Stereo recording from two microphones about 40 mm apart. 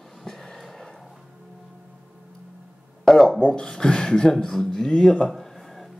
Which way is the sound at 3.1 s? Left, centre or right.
Centre.